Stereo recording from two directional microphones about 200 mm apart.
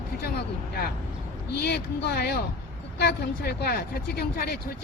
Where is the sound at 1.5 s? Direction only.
55° left (ahead or behind).